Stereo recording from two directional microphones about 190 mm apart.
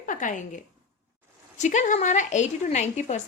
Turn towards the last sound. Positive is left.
turn(degrees=40)  # may be behind; listen again after turning